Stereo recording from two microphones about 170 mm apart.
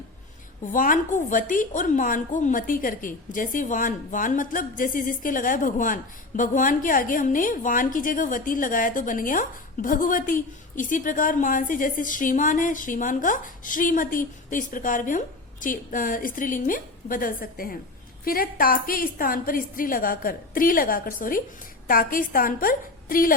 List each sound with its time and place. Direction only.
0.7 s a woman's voice: 50° left (ahead or behind)